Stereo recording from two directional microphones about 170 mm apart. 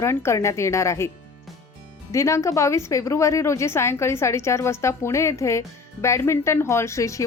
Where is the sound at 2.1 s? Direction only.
15° left (ahead or behind).